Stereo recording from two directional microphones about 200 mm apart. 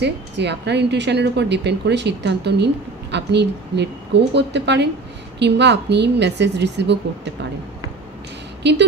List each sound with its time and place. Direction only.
0.0 s a woman's voice: 60° right (ahead or behind)
8.6 s a woman's voice: 60° right (ahead or behind)